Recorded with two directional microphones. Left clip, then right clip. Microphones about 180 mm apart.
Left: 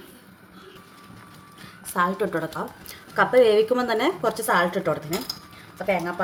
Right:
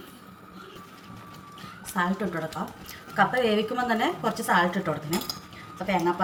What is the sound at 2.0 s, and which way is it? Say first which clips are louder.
Speech: left 5 dB; 45° left (ahead or behind).